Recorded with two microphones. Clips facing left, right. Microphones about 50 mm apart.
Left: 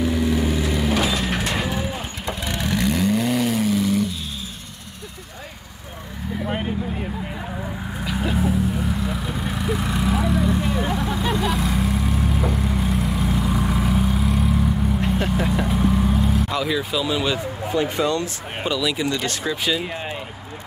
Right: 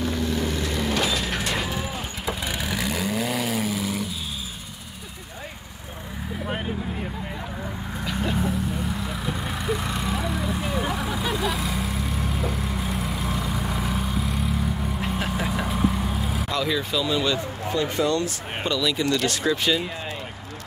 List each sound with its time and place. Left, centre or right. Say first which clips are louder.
0.0 s vehicle: left 5 dB; centre
1.5 s livestock: left 3 dB; centre
2.2 s vehicle: left 2 dB; centre
8.0 s vehicle: left 3 dB; centre
16.4 s speech: left 2 dB; centre
18.0 s speech: even; left
18.6 s speech: left 2 dB; centre